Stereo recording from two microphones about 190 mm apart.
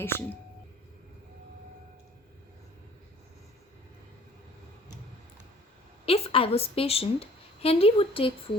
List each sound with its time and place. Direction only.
0.0 s speech: 10° left (ahead or behind)
6.1 s a woman's voice: 30° left (ahead or behind)